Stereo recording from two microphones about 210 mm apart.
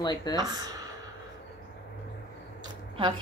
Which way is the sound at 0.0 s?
20° left (ahead or behind).